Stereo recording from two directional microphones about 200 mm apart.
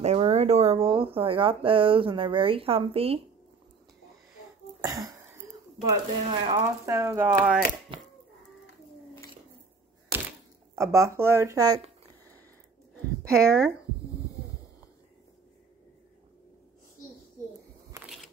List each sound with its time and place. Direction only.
0.0 s speech: 30° right (ahead or behind)
4.8 s wheeze: 15° right (ahead or behind)
6.2 s speech: 25° right (ahead or behind); by 7.6 s 10° right (ahead or behind)
7.9 s a sound: 25° right (ahead or behind)
10.8 s speech: 15° right (ahead or behind)
13.3 s speech: 5° left (ahead or behind)